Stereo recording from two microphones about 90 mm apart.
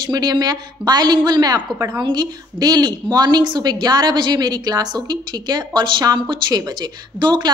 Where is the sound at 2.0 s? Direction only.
55° right (ahead or behind).